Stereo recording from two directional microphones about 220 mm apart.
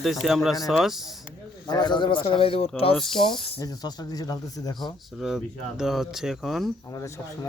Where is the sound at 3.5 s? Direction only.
15° left (ahead or behind).